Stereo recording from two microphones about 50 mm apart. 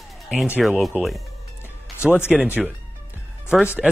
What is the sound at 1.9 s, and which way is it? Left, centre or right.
Speech, left.